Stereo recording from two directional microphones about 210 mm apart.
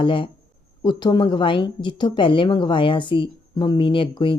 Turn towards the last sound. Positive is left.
turn(degrees=25)  # may be behind; listen again after turning